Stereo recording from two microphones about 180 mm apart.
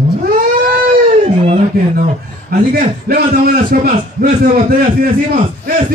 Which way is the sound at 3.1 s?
55° right (ahead or behind).